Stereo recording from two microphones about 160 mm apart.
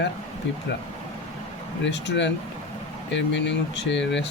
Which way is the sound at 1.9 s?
90° left.